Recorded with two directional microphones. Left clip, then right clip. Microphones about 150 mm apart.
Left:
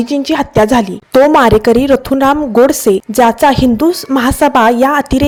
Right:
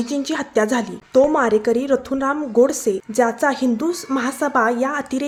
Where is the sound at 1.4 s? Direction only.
65° left (ahead or behind).